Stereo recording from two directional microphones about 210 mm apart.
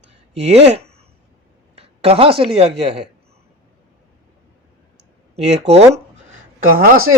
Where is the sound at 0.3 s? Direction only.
30° right (ahead or behind).